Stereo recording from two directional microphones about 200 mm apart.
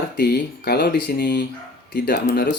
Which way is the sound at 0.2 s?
50° left (ahead or behind).